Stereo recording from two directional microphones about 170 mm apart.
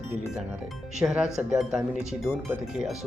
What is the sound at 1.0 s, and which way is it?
Speech, 5° right (ahead or behind).